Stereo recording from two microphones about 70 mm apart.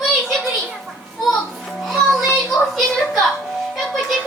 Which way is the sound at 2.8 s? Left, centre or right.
Centre.